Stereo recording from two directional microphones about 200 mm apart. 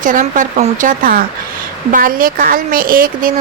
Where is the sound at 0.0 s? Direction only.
40° right (ahead or behind).